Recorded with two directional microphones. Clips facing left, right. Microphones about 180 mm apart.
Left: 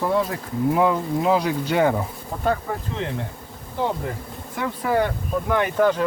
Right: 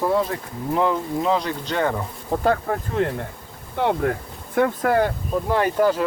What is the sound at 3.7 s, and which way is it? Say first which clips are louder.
Speech: right 4 dB; 70° right (ahead or behind).